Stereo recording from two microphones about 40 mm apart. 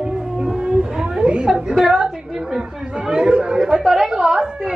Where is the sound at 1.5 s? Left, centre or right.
Centre.